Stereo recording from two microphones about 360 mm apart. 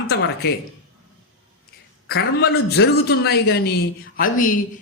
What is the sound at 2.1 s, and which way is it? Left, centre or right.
Speech, left.